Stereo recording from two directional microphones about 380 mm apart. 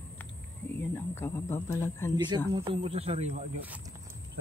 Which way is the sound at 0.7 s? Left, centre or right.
Centre.